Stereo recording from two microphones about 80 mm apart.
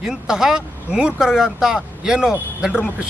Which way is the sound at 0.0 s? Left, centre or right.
Centre.